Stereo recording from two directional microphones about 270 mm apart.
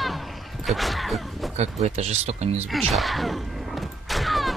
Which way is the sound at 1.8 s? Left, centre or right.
Right.